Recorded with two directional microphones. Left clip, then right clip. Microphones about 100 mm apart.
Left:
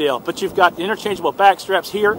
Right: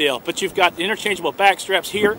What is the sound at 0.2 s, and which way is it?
Speech, 55° right (ahead or behind).